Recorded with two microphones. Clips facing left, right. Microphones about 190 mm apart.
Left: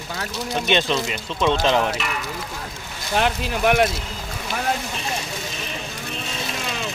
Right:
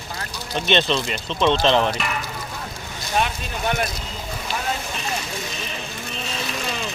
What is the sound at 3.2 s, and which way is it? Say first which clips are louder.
Speech: left 6 dB; 85° left.